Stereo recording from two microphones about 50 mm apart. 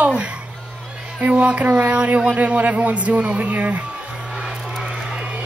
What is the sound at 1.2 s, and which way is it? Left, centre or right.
Speech, right.